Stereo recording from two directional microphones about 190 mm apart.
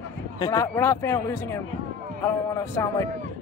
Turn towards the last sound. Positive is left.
turn(degrees=15)  # may be behind; listen again after turning